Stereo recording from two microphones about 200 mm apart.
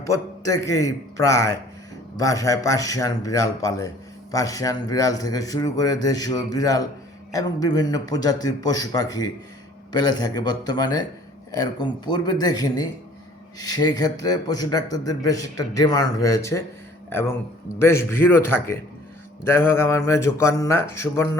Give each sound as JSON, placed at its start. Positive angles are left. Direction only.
{"t": 0.0, "sound": "a man's voice", "side_deg": 15}